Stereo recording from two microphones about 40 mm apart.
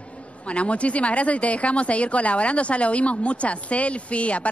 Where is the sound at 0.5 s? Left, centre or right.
Left.